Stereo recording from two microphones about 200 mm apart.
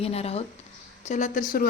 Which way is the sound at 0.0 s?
30° left (ahead or behind).